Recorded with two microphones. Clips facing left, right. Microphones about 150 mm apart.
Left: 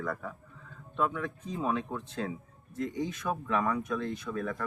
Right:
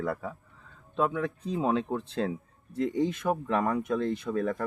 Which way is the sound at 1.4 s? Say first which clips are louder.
Right 4 dB; 30° right (ahead or behind).